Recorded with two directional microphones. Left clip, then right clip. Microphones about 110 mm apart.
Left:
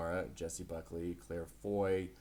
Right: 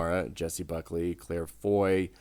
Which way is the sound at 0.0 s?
35° right (ahead or behind).